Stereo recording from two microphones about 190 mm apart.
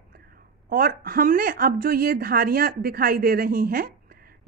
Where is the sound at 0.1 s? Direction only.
50° right (ahead or behind).